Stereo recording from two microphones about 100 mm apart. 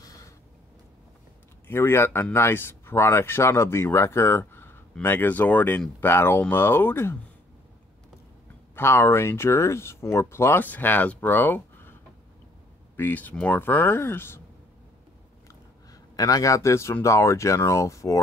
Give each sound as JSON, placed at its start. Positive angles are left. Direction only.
{"t": 0.0, "sound": "a sound", "side_deg": 35}
{"t": 1.7, "sound": "speech", "side_deg": 25}
{"t": 8.7, "sound": "speech", "side_deg": 25}
{"t": 12.9, "sound": "speech", "side_deg": 20}
{"t": 15.9, "sound": "a man's voice", "side_deg": 40}